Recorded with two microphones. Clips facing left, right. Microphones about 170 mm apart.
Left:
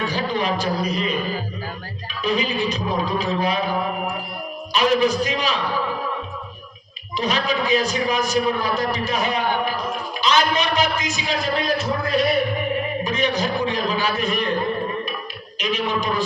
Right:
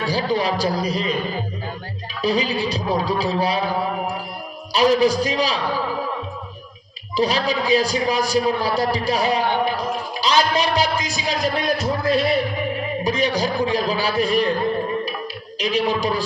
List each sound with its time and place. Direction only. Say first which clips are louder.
0.0 s a man's voice: right 2 dB; 35° right (ahead or behind)
2.2 s a man's voice: right 1 dB; 35° right (ahead or behind)
7.2 s a man's voice: right 2 dB; 35° right (ahead or behind)
15.5 s a man's voice: right 3 dB; 35° right (ahead or behind)